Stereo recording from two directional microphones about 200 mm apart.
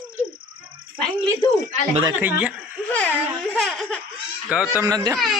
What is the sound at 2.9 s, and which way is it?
Speech, 10° left (ahead or behind).